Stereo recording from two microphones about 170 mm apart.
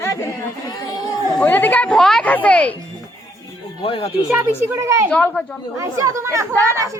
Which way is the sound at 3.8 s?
35° left (ahead or behind).